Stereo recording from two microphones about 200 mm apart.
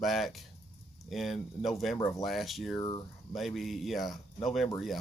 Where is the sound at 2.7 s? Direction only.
20° left (ahead or behind).